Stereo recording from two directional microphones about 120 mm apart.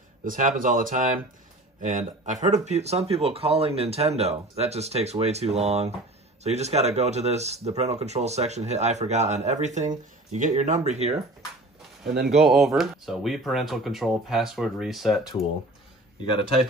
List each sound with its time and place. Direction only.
0.4 s speech: 90° right
2.4 s speech: 75° right (ahead or behind)
12.0 s speech: 5° right (ahead or behind)